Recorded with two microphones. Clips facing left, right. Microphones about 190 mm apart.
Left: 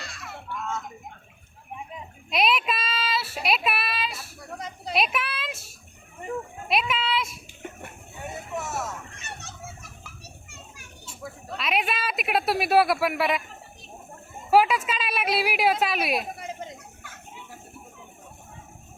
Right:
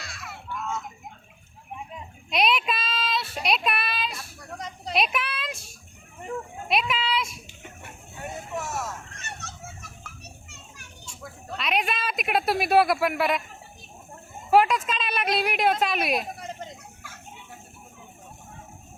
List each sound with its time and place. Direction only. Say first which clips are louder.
0.0 s a sound: left 1 dB; centre (ahead or behind)
2.3 s a child's voice: even; centre (ahead or behind)
7.6 s a sound: left 6 dB; 50° left (ahead or behind)
8.5 s speech: left 1 dB; centre (ahead or behind)
10.8 s a child's voice: left 2 dB; 5° left (ahead or behind)
14.5 s speech: even; 5° left (ahead or behind)